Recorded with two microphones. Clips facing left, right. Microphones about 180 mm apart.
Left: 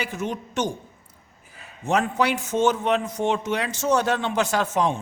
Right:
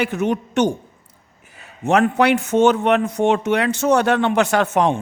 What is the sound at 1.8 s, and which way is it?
Speech, 70° right (ahead or behind).